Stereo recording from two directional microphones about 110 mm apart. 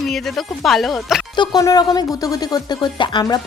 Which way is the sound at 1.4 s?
35° left (ahead or behind).